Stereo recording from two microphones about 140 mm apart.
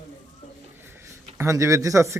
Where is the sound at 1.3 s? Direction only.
20° right (ahead or behind).